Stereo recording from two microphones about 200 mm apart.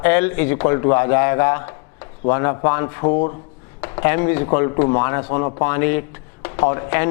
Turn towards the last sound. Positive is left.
turn(degrees=15)  # may be behind; listen again after turning